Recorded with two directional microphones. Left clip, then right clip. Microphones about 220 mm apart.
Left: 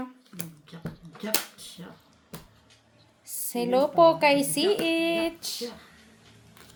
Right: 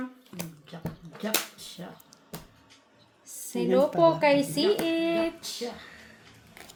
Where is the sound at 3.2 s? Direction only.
35° left (ahead or behind).